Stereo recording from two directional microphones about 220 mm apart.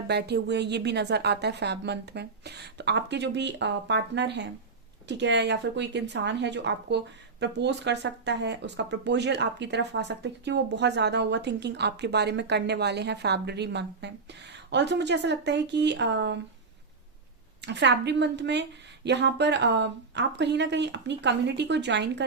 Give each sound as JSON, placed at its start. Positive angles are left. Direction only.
{"t": 0.1, "sound": "a woman's voice", "side_deg": -50}
{"t": 17.7, "sound": "a woman's voice", "side_deg": -50}